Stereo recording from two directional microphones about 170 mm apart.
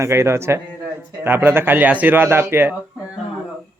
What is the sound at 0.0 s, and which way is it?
Speech, 15° right (ahead or behind).